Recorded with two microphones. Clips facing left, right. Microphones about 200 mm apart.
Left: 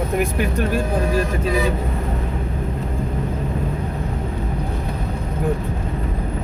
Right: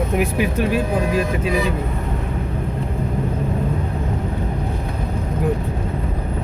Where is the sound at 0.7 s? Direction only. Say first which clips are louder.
Right 1 dB; 45° left (ahead or behind).